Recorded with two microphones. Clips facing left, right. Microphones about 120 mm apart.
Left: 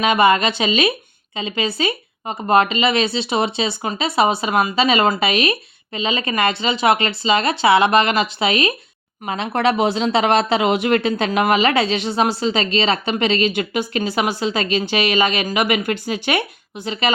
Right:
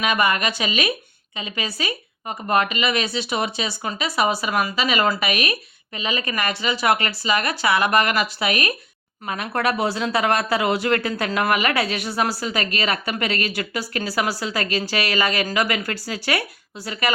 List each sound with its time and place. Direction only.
0.0 s speech: 25° left (ahead or behind)